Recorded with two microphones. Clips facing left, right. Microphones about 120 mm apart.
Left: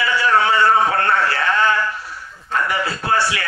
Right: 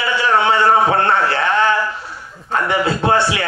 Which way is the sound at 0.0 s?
25° right (ahead or behind).